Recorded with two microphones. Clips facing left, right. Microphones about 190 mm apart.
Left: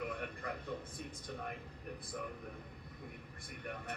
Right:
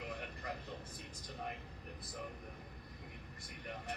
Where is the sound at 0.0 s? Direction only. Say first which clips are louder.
Left 4 dB; 55° left (ahead or behind).